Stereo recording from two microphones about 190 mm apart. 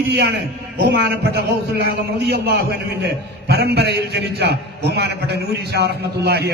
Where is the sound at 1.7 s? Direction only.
55° right (ahead or behind).